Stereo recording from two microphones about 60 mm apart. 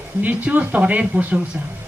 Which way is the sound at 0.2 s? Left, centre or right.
Right.